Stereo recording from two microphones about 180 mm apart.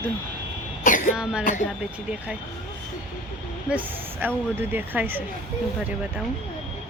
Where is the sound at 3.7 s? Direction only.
10° right (ahead or behind).